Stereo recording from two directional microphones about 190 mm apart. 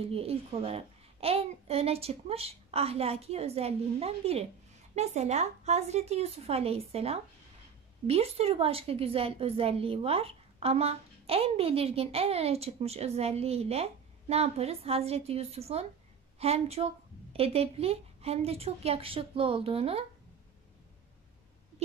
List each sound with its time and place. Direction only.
0.1 s a woman's voice: 30° right (ahead or behind)